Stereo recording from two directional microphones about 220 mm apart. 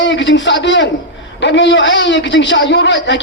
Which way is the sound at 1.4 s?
55° left (ahead or behind).